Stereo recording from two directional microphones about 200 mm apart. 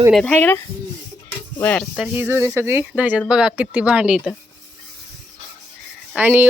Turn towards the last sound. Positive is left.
turn(degrees=-10)  # may be behind; listen again after turning